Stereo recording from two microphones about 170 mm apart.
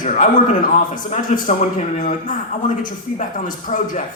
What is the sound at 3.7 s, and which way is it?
Speech, 40° left (ahead or behind).